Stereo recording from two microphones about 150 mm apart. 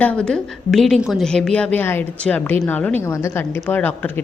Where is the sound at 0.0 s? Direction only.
10° left (ahead or behind).